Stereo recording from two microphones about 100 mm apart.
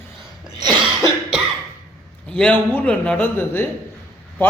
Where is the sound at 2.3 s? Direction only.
10° left (ahead or behind).